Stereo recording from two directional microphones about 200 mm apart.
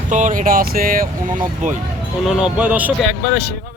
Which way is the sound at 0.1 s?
40° right (ahead or behind).